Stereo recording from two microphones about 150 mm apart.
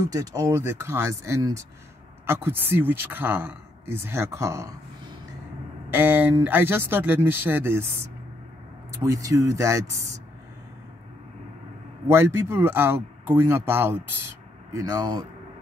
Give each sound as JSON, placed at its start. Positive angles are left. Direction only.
{"t": 0.1, "sound": "speech", "side_deg": -25}
{"t": 5.9, "sound": "speech", "side_deg": -15}
{"t": 8.9, "sound": "speech", "side_deg": -20}
{"t": 12.1, "sound": "speech", "side_deg": -15}